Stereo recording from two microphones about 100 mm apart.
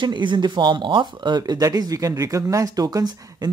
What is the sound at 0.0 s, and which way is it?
Speech, 50° right (ahead or behind).